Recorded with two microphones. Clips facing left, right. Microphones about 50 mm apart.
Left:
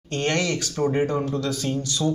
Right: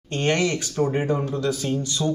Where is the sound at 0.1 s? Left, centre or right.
Centre.